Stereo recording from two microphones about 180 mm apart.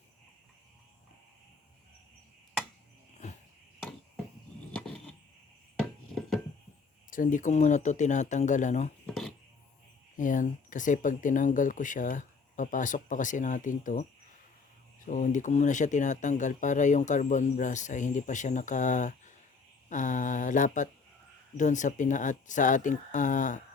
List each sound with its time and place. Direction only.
4.7 s a sound: 5° left (ahead or behind)
7.1 s speech: 45° left (ahead or behind)
9.0 s music: centre (ahead or behind)
10.2 s speech: 45° left (ahead or behind)